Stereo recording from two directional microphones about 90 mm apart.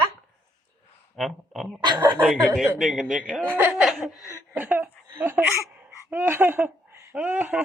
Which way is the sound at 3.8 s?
10° right (ahead or behind).